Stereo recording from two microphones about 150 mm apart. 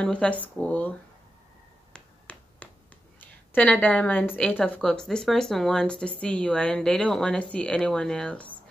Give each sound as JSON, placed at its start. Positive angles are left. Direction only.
{"t": 0.0, "sound": "a woman's voice", "side_deg": 10}
{"t": 1.9, "sound": "finger snapping", "side_deg": 10}
{"t": 3.2, "sound": "a woman's voice", "side_deg": 10}